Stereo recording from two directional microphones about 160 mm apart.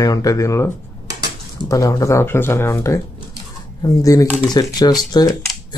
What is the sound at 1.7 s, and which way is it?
Speech, 20° left (ahead or behind).